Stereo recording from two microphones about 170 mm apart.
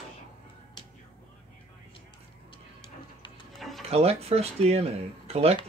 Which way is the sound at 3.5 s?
Centre (ahead or behind).